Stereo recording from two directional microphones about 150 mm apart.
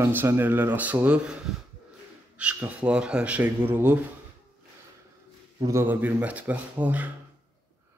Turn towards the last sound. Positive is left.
turn(degrees=-10)  # may be behind; listen again after turning